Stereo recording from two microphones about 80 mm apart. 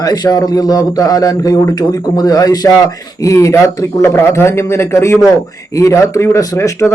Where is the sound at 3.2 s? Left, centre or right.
Left.